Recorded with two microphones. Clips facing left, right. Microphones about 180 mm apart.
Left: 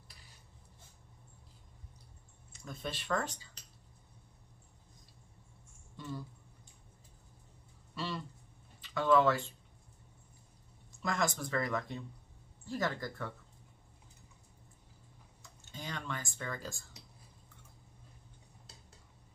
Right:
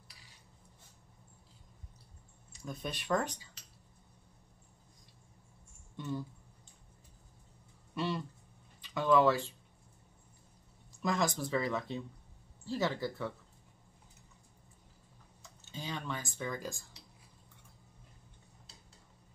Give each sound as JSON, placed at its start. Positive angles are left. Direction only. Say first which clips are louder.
{"t": 2.6, "sound": "speech", "louder": "right 1 dB", "side_deg": -15}
{"t": 5.9, "sound": "a sound", "louder": "right 4 dB", "side_deg": -20}
{"t": 7.9, "sound": "speech", "louder": "right 4 dB", "side_deg": -20}
{"t": 11.0, "sound": "speech", "louder": "right 2 dB", "side_deg": -20}
{"t": 15.7, "sound": "speech", "louder": "right 2 dB", "side_deg": -15}